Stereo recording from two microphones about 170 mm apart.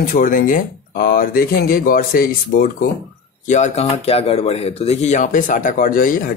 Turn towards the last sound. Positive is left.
turn(degrees=55)  # may be behind; listen again after turning